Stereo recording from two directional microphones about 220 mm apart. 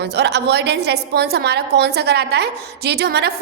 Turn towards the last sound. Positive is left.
turn(degrees=-45)  # may be behind; listen again after turning